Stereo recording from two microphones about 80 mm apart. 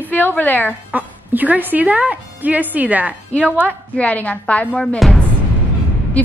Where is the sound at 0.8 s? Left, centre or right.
Right.